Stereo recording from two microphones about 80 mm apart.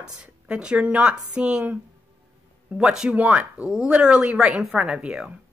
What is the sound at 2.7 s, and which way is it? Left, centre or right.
Speech, centre.